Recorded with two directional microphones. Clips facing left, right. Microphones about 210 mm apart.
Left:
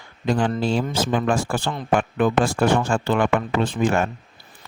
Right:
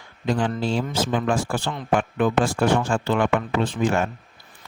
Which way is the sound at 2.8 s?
50° left (ahead or behind).